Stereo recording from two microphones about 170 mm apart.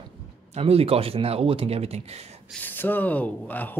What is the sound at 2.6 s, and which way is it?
Speech, 10° left (ahead or behind).